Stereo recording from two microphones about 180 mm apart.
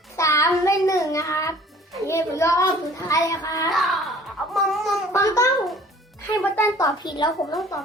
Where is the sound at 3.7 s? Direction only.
Centre (ahead or behind).